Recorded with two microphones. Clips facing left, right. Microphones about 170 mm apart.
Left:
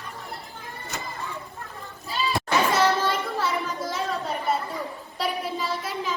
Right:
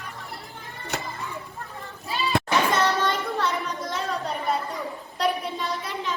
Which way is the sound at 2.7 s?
5° left (ahead or behind).